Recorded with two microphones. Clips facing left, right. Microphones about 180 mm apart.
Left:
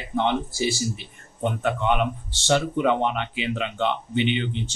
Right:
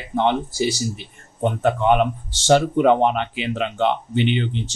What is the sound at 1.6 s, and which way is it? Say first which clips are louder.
A man's voice: right 6 dB; 45° right (ahead or behind).